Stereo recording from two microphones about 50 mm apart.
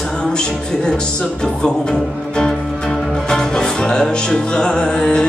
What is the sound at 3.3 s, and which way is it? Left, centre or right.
Music, centre.